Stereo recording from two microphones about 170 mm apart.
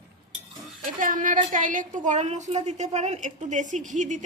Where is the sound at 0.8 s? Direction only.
50° right (ahead or behind).